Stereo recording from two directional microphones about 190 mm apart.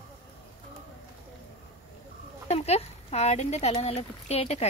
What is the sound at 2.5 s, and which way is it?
Speech, 35° left (ahead or behind).